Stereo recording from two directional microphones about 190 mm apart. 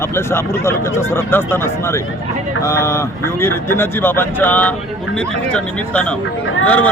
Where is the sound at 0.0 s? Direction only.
15° left (ahead or behind).